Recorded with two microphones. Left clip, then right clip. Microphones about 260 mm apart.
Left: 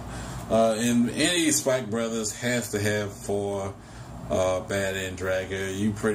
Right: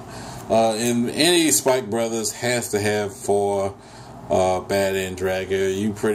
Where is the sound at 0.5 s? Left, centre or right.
Right.